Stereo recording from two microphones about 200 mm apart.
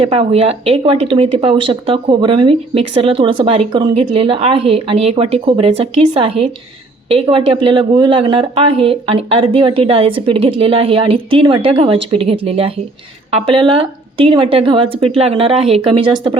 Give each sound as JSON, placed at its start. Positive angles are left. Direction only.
{"t": 0.0, "sound": "speech", "side_deg": -30}